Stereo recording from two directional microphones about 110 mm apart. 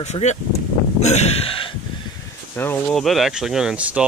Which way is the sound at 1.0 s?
90° left.